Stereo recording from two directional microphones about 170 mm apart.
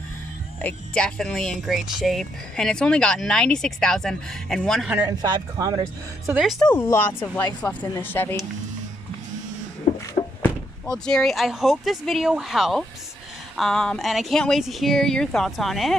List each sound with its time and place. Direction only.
0.6 s speech: 5° left (ahead or behind)
5.0 s speech: 20° right (ahead or behind)
6.3 s speech: centre (ahead or behind)
6.7 s speech: 15° left (ahead or behind)
10.4 s speech: 5° left (ahead or behind)